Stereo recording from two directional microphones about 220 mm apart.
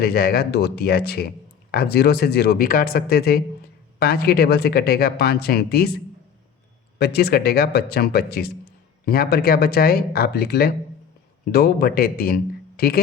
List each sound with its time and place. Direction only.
0.0 s speech: 45° left (ahead or behind)
7.0 s speech: 45° left (ahead or behind)